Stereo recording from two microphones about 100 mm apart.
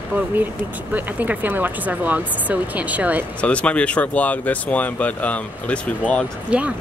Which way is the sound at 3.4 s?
10° left (ahead or behind).